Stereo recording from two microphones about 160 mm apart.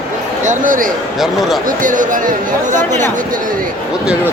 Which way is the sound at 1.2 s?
Centre (ahead or behind).